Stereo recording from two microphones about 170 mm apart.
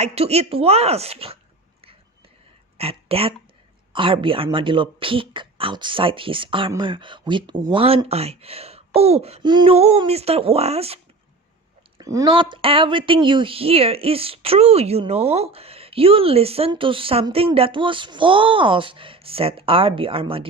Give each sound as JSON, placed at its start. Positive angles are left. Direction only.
{"t": 0.0, "sound": "speech", "side_deg": -40}
{"t": 2.8, "sound": "speech", "side_deg": -35}
{"t": 12.0, "sound": "speech", "side_deg": -20}